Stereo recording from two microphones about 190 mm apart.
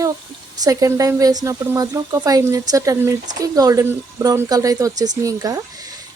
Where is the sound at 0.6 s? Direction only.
20° right (ahead or behind).